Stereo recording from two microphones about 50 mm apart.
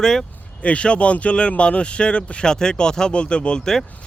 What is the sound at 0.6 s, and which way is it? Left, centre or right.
Speech, left.